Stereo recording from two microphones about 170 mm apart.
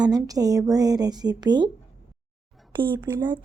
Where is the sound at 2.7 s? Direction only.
30° right (ahead or behind).